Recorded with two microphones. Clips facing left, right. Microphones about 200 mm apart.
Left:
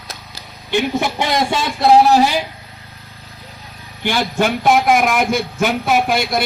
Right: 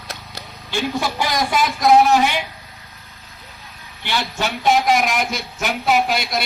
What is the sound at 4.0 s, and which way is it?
Speech, 45° left (ahead or behind).